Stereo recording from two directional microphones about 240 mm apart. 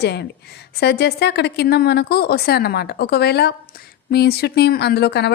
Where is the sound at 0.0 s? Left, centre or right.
Left.